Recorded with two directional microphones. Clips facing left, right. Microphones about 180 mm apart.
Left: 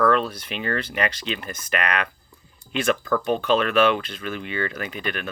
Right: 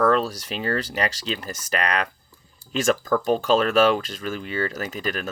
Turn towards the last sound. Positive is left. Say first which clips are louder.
# right 1 dB
turn(degrees=-40)  # may be behind; listen again after turning